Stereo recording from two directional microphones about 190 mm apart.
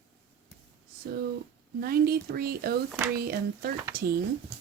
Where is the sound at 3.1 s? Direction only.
55° right (ahead or behind).